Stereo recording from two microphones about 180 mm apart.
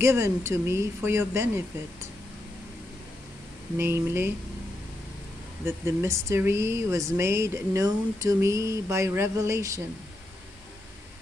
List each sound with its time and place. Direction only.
0.0 s speech: 15° right (ahead or behind)
3.7 s speech: 15° right (ahead or behind)
5.7 s speech: 15° right (ahead or behind)